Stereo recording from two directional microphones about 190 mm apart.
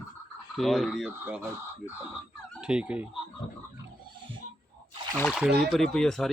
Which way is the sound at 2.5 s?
5° right (ahead or behind).